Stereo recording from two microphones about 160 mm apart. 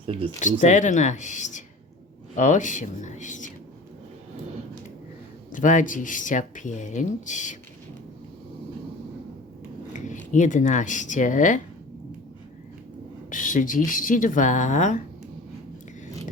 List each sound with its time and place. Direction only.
0.0 s speech: 35° right (ahead or behind)
0.6 s speech: 50° left (ahead or behind)
5.5 s speech: 55° left (ahead or behind)
9.9 s speech: 50° left (ahead or behind)
13.3 s speech: 55° left (ahead or behind)